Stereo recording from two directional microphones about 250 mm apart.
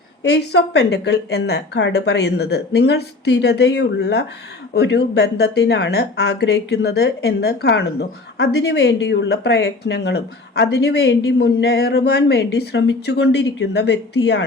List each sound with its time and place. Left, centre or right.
0.2 s speech: left